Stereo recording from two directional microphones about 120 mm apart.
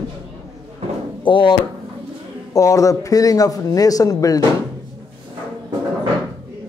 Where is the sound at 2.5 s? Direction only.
25° left (ahead or behind).